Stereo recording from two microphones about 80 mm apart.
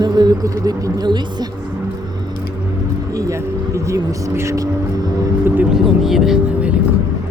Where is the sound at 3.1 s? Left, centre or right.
Right.